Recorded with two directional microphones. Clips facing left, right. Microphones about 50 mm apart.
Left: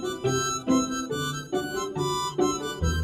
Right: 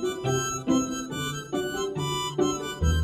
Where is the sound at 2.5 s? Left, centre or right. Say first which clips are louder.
Even; right.